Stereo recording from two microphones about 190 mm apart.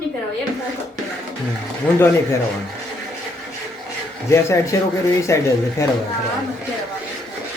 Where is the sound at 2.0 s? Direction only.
15° left (ahead or behind).